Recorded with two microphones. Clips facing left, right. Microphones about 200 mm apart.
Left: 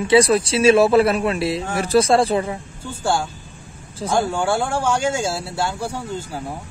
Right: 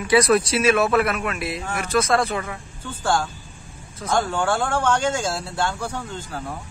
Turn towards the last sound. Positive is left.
turn(degrees=10)  # may be behind; listen again after turning